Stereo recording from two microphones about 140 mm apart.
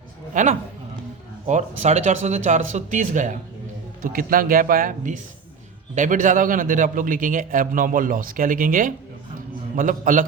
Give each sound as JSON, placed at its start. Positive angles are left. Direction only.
{"t": 0.4, "sound": "a man's voice", "side_deg": -65}
{"t": 1.5, "sound": "speech", "side_deg": -55}
{"t": 4.0, "sound": "a man's voice", "side_deg": -90}